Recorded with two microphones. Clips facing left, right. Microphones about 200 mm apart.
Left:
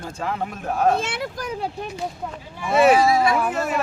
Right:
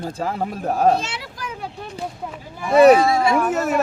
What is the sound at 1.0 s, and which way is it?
Speech, 50° left (ahead or behind).